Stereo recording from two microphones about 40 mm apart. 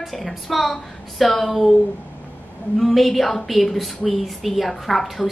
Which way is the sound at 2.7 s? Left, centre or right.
Centre.